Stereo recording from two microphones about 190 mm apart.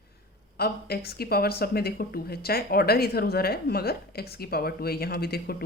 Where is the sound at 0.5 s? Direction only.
55° left (ahead or behind).